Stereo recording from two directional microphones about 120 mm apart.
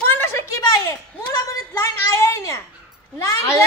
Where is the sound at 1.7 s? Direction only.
25° left (ahead or behind).